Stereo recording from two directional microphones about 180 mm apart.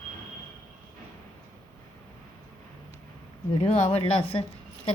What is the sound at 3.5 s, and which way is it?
Speech, 35° left (ahead or behind).